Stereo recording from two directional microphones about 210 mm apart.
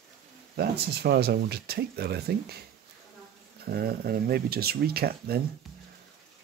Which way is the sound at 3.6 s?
45° right (ahead or behind).